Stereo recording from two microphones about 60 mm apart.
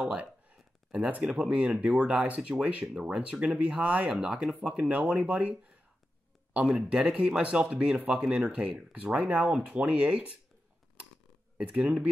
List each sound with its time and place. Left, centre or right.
0.9 s speech: centre
4.5 s speech: centre
4.7 s speech: right
11.5 s speech: centre